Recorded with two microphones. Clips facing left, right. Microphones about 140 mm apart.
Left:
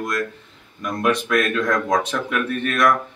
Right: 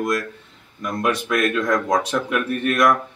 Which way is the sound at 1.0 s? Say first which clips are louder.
Left 1 dB; 10° right (ahead or behind).